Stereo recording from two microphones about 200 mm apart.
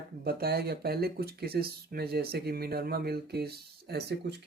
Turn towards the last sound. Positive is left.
turn(degrees=-55)  # may be behind; listen again after turning